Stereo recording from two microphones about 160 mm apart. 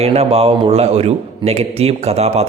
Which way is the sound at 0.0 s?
40° right (ahead or behind).